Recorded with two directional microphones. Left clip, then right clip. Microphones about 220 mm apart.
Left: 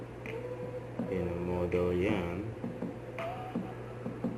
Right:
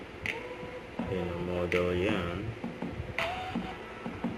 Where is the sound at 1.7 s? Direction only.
20° right (ahead or behind).